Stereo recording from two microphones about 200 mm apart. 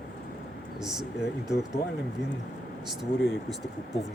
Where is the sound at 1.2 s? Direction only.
55° left (ahead or behind).